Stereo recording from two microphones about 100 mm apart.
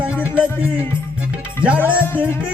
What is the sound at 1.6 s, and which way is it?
Music, 15° right (ahead or behind).